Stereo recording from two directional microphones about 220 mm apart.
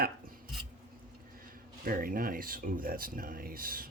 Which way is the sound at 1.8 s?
40° right (ahead or behind).